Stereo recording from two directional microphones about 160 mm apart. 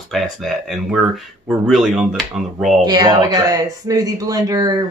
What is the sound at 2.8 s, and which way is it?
Speech, 25° right (ahead or behind).